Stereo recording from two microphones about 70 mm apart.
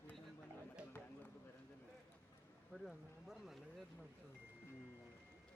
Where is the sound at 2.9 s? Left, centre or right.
Centre.